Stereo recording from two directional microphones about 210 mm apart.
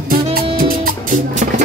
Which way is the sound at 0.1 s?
45° right (ahead or behind).